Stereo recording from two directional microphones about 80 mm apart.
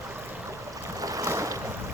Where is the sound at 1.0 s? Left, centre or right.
Right.